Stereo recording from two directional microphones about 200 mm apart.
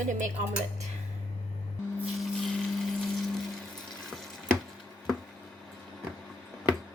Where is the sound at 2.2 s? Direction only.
Centre (ahead or behind).